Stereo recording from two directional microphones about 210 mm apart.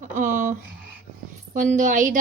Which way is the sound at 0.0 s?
40° right (ahead or behind).